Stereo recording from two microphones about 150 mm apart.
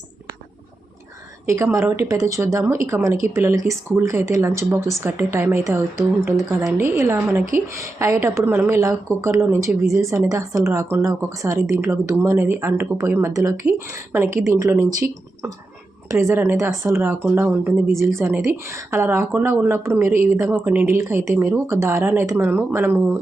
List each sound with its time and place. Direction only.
1.5 s a woman's voice: 20° right (ahead or behind)